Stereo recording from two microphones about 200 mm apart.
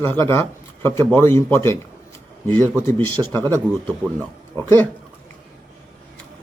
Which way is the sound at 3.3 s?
20° right (ahead or behind).